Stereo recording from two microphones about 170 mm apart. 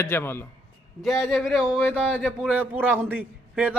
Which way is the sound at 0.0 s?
15° left (ahead or behind).